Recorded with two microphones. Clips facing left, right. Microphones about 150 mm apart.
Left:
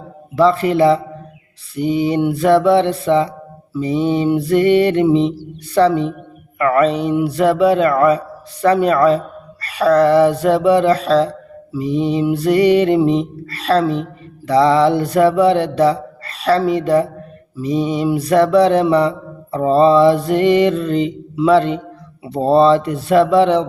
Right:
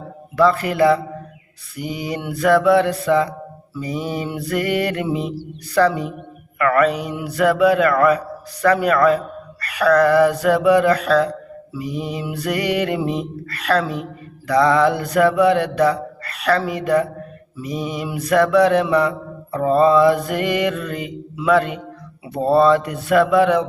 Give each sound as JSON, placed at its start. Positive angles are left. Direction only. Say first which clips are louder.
{"t": 0.3, "sound": "speech", "louder": "left 3 dB", "side_deg": 25}